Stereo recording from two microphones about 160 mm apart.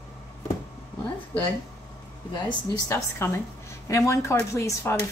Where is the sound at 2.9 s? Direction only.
15° left (ahead or behind).